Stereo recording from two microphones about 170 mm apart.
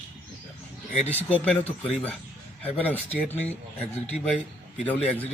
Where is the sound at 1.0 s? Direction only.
10° left (ahead or behind).